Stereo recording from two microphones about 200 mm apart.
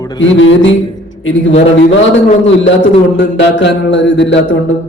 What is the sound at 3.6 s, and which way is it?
Mantra, 65° left (ahead or behind).